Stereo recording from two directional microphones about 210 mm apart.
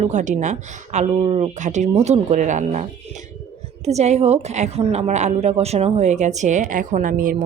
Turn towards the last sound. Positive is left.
turn(degrees=-40)  # may be behind; listen again after turning